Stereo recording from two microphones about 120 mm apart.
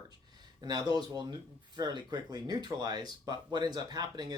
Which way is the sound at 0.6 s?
35° right (ahead or behind).